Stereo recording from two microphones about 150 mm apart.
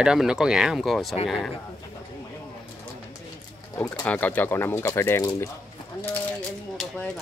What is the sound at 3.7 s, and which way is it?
Speech, 20° left (ahead or behind).